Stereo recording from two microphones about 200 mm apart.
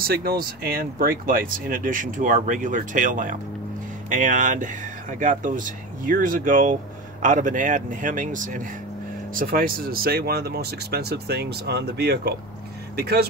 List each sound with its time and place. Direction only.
0.0 s speech: 50° right (ahead or behind)